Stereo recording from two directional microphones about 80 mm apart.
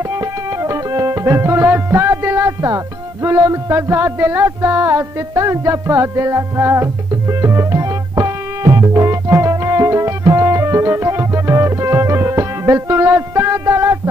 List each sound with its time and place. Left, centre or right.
0.1 s music: right